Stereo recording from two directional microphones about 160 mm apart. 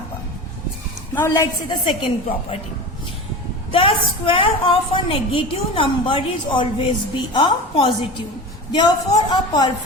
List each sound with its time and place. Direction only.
1.1 s a woman's voice: 15° left (ahead or behind)
1.9 s a woman's voice: 35° left (ahead or behind)
3.7 s a woman's voice: 35° left (ahead or behind)